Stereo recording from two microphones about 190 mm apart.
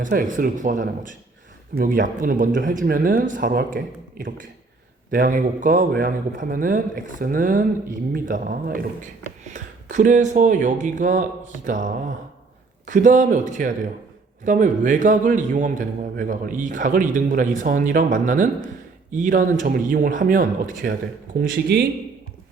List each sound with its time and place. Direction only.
0.0 s a man's voice: 45° right (ahead or behind)
5.1 s a man's voice: 45° right (ahead or behind)
21.7 s a man's voice: 60° right (ahead or behind)